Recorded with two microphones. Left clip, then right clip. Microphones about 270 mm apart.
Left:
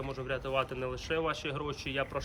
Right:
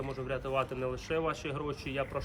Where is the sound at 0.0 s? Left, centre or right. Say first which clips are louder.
Even; centre.